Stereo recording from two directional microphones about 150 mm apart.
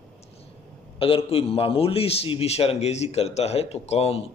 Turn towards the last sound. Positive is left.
turn(degrees=40)  # may be behind; listen again after turning